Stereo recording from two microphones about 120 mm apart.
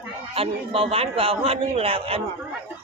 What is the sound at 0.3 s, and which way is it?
A man's voice, 50° right (ahead or behind).